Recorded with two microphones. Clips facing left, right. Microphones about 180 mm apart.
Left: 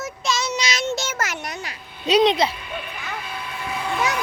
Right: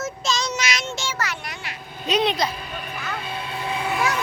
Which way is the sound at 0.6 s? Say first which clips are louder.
Left 1 dB; 25° left (ahead or behind).